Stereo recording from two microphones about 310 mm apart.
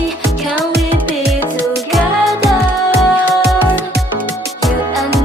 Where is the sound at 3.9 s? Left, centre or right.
Right.